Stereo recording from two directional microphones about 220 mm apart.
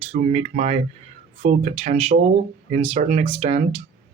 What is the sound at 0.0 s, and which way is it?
Speech, 30° right (ahead or behind).